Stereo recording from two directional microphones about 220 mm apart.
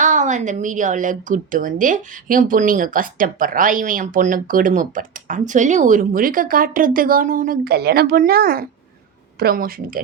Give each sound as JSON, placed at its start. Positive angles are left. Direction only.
{"t": 0.0, "sound": "a woman's voice", "side_deg": -35}